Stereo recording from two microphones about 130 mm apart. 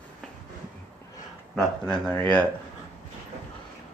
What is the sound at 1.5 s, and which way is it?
Speech, 5° left (ahead or behind).